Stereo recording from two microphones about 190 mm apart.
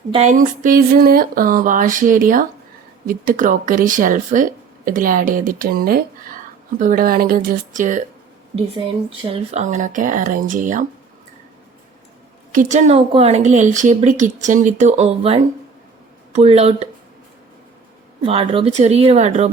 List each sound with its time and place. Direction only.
0.1 s speech: 35° right (ahead or behind)
9.3 s a woman's voice: 35° right (ahead or behind)
12.5 s a woman's voice: 45° right (ahead or behind)
18.2 s a woman's voice: 30° right (ahead or behind)